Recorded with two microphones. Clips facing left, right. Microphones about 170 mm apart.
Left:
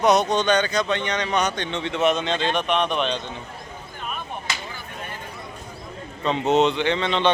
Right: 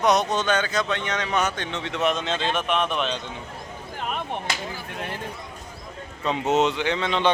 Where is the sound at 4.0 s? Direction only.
80° right.